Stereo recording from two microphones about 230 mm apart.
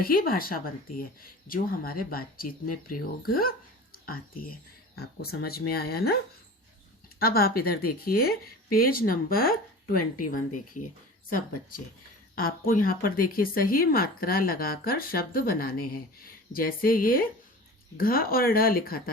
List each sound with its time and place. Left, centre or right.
0.0 s a woman's voice: left
7.2 s a woman's voice: left